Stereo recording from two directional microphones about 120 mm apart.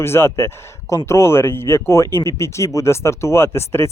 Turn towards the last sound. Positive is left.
turn(degrees=20)  # may be behind; listen again after turning